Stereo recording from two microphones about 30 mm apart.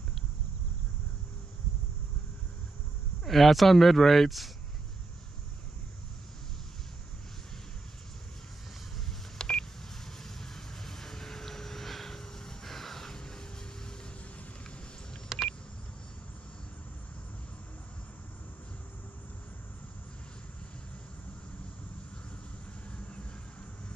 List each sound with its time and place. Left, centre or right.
3.3 s speech: centre
9.4 s beep: left
10.2 s vehicle: centre
15.3 s beep: centre